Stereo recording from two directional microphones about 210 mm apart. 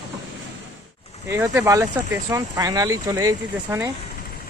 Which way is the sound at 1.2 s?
10° right (ahead or behind).